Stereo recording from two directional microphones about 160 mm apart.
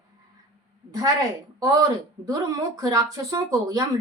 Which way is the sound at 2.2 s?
20° right (ahead or behind).